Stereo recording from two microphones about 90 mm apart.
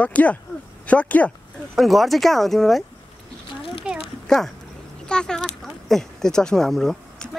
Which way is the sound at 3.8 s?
10° right (ahead or behind).